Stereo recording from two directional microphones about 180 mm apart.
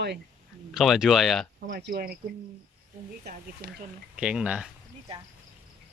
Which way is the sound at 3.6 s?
60° right (ahead or behind).